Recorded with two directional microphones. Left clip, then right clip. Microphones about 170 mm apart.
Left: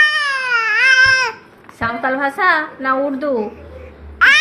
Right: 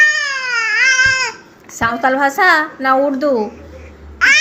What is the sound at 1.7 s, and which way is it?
A woman's voice, 25° right (ahead or behind).